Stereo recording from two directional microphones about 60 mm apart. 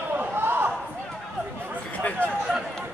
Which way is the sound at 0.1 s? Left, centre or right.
Right.